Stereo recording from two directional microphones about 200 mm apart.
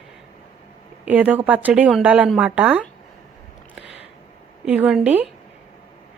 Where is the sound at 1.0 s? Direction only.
5° right (ahead or behind).